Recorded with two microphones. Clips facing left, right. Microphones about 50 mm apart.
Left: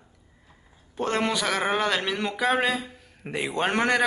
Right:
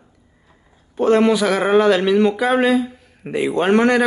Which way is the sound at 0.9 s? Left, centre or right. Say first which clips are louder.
Right 11 dB; centre.